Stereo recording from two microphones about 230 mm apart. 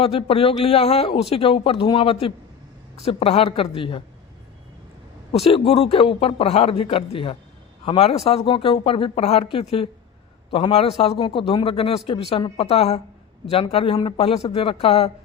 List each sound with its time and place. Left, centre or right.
0.0 s a man's voice: left
5.3 s a man's voice: left